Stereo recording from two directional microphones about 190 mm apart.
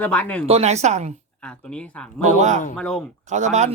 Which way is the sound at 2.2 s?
40° right (ahead or behind).